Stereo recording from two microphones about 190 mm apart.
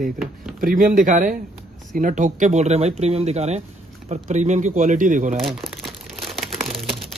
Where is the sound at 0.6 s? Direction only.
45° right (ahead or behind).